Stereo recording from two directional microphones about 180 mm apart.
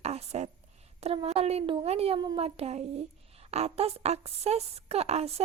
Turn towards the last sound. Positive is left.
turn(degrees=-35)  # may be behind; listen again after turning